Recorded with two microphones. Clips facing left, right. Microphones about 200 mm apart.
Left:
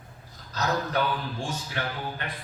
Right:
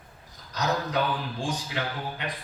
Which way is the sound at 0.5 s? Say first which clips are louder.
Even; 15° right (ahead or behind).